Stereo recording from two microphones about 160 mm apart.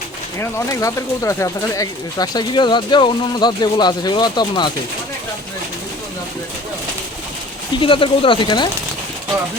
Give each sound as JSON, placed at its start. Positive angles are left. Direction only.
{"t": 0.3, "sound": "speech", "side_deg": 20}
{"t": 7.8, "sound": "speech", "side_deg": 30}